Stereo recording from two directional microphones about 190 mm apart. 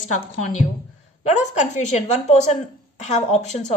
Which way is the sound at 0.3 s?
40° left (ahead or behind).